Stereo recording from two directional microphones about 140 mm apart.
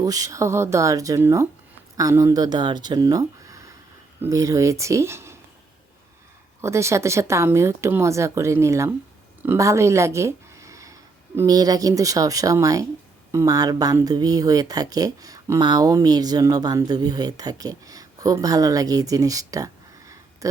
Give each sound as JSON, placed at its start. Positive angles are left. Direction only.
{"t": 0.0, "sound": "speech", "side_deg": -25}
{"t": 6.6, "sound": "speech", "side_deg": -20}